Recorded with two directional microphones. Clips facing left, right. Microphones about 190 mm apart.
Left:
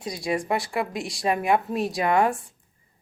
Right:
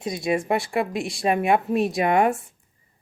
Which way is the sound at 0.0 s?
20° right (ahead or behind).